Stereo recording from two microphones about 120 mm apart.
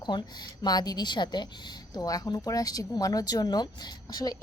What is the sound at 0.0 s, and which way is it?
Speech, 35° left (ahead or behind).